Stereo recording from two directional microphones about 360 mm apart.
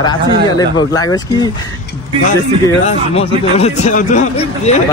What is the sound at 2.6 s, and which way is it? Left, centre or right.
A man's voice, centre.